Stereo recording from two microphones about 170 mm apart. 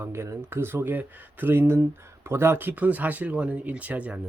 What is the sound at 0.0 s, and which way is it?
Speech, 15° right (ahead or behind).